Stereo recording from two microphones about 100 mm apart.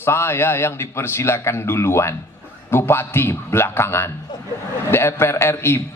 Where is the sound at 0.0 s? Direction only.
25° left (ahead or behind).